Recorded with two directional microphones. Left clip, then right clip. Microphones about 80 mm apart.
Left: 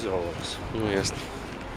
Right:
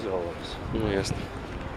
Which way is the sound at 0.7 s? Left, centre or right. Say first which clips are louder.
Left 1 dB; centre.